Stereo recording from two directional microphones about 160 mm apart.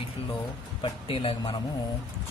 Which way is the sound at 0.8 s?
35° left (ahead or behind).